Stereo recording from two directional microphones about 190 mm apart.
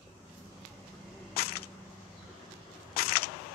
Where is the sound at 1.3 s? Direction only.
55° left (ahead or behind).